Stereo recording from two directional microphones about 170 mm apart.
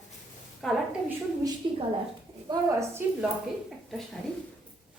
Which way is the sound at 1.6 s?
25° right (ahead or behind).